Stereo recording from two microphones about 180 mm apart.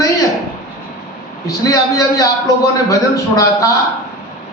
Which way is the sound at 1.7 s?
20° left (ahead or behind).